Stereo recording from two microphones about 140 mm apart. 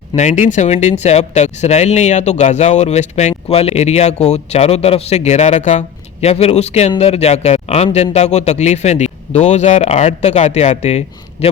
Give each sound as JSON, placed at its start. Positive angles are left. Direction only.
{"t": 0.2, "sound": "speech", "side_deg": 60}